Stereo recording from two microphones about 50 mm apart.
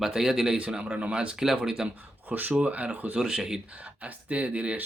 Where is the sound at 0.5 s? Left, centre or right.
Right.